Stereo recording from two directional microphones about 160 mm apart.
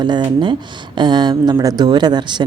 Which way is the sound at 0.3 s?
30° right (ahead or behind).